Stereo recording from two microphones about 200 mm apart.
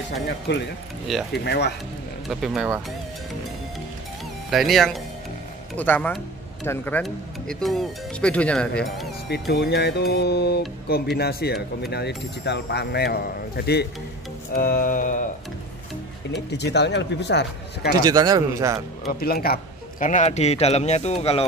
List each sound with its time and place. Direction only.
0.5 s a man's voice: 60° left (ahead or behind)
1.1 s speech: centre (ahead or behind)
1.4 s a man's voice: 55° left (ahead or behind)
2.2 s speech: centre (ahead or behind)
4.5 s speech: centre (ahead or behind)
9.3 s a man's voice: 55° left (ahead or behind)
16.4 s a man's voice: 60° left (ahead or behind)
18.0 s speech: 20° right (ahead or behind)
19.1 s a man's voice: 50° left (ahead or behind); by 21.5 s 30° left (ahead or behind)